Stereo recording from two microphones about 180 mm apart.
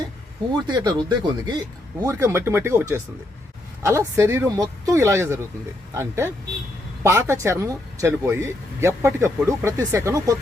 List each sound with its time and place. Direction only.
0.7 s speech: 25° right (ahead or behind)